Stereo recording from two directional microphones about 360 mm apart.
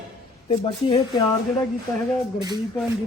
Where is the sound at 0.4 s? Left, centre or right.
Centre.